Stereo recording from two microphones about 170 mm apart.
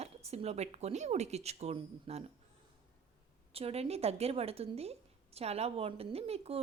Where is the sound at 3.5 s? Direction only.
35° right (ahead or behind).